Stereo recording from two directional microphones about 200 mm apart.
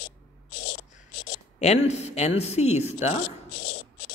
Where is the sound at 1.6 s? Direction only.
35° left (ahead or behind).